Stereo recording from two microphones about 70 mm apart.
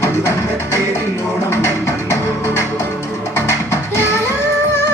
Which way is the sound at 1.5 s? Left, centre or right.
Left.